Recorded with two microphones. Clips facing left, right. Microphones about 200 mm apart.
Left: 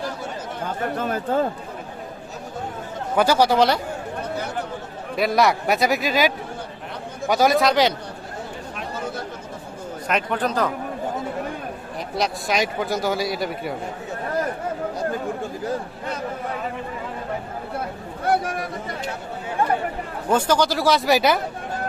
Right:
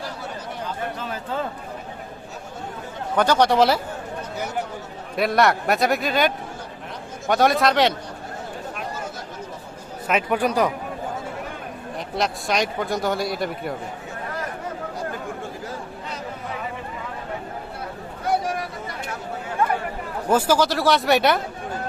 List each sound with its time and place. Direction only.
0.9 s speech: 50° left (ahead or behind)
3.2 s a man's voice: 5° left (ahead or behind)
5.1 s a man's voice: centre (ahead or behind)
10.1 s speech: 5° right (ahead or behind)
12.1 s a man's voice: centre (ahead or behind)
20.3 s a man's voice: 5° right (ahead or behind)